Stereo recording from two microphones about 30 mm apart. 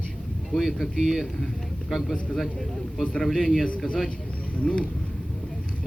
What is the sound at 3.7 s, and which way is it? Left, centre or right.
Speech, left.